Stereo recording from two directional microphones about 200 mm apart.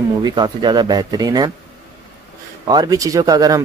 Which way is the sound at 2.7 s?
20° right (ahead or behind).